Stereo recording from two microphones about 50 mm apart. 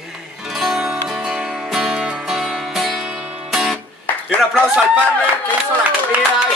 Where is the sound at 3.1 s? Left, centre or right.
Right.